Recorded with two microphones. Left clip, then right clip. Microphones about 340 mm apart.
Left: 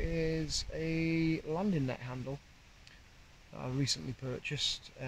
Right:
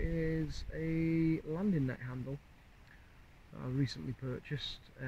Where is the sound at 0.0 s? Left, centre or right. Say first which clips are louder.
Left 2 dB; left.